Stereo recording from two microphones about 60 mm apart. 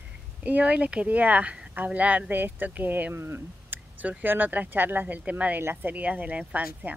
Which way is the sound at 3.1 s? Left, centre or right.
Right.